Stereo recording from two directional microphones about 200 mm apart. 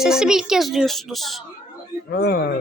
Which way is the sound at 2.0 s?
50° left (ahead or behind).